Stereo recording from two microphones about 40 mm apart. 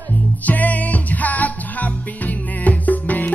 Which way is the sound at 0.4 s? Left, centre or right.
Left.